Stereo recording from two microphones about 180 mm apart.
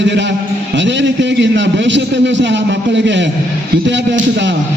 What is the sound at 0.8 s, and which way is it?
A man's voice, 85° right.